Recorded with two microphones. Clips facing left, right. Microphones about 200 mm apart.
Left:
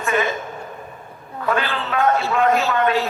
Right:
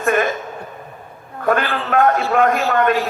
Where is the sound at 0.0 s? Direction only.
55° right (ahead or behind).